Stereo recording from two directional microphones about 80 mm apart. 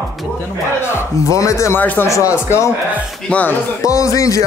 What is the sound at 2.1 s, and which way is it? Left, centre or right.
Speech, left.